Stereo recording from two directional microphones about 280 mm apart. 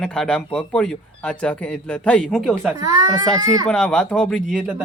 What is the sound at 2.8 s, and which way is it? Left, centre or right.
Speech, centre.